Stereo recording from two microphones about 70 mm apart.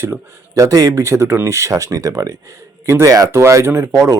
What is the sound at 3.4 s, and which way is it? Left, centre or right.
Speech, right.